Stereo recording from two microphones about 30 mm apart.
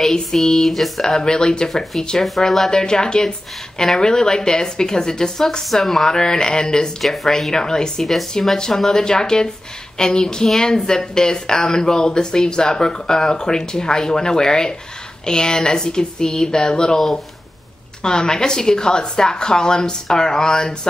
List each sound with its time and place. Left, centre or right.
0.4 s a sound: centre
1.0 s speech: left
2.4 s speech: centre
2.7 s speech: left
5.8 s speech: centre
6.0 s speech: left
7.0 s speech: centre
7.5 s speech: left
8.0 s a sound: centre
8.5 s speech: centre
18.0 s speech: left